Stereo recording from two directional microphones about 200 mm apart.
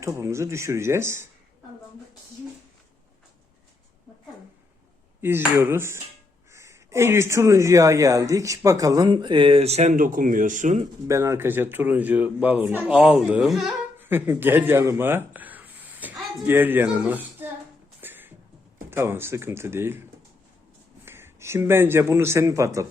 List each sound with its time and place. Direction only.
0.0 s speech: 15° right (ahead or behind)
5.2 s speech: 10° right (ahead or behind); by 10.8 s 40° right (ahead or behind)
11.1 s speech: 15° right (ahead or behind)
18.0 s a sound: 10° right (ahead or behind)
18.9 s speech: 10° right (ahead or behind)
21.0 s a man's voice: 10° right (ahead or behind)